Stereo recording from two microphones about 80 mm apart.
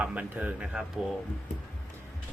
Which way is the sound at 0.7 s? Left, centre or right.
Centre.